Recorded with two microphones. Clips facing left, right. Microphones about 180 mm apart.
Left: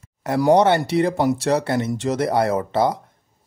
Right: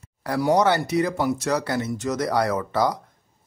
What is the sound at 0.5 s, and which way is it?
A man's voice, 30° left (ahead or behind).